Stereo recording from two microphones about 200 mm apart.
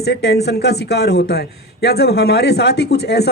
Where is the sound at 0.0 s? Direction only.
55° left (ahead or behind).